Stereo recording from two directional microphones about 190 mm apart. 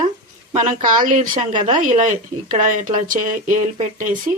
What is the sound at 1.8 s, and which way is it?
Speech, 45° right (ahead or behind).